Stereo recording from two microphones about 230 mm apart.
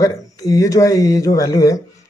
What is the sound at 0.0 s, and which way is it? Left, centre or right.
A man's voice, centre.